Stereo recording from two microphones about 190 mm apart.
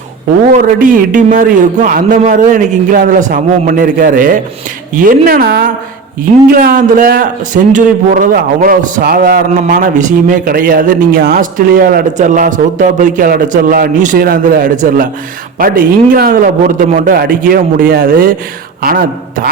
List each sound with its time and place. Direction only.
0.5 s a man's voice: 45° right (ahead or behind)